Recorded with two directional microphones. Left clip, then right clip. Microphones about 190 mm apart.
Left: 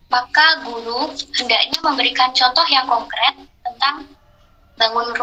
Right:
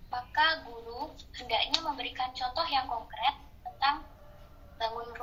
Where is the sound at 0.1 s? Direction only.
50° left (ahead or behind).